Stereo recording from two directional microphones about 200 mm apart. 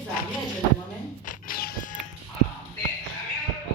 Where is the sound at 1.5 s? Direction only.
45° left (ahead or behind).